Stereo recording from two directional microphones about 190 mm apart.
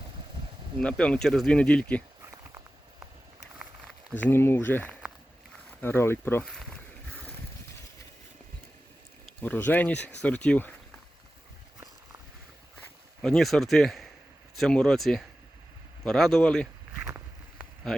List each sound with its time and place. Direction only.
0.8 s speech: 5° left (ahead or behind)
2.3 s a sound: 20° right (ahead or behind)
4.1 s speech: 10° left (ahead or behind)
6.5 s speech: centre (ahead or behind)
9.2 s speech: 10° left (ahead or behind)
13.2 s speech: centre (ahead or behind)
17.0 s walk: 15° right (ahead or behind)